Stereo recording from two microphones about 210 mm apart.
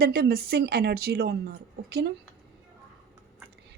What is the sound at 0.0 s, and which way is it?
Speech, 45° right (ahead or behind).